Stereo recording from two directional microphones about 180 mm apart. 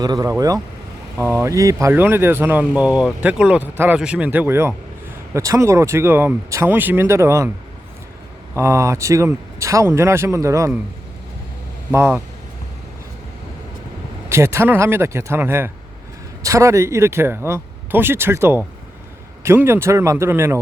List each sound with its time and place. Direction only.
0.0 s speech: 20° right (ahead or behind)
8.5 s speech: 15° right (ahead or behind)
11.9 s speech: 10° right (ahead or behind)
14.3 s speech: 15° right (ahead or behind)